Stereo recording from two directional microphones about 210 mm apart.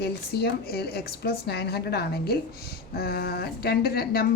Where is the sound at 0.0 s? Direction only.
50° left (ahead or behind).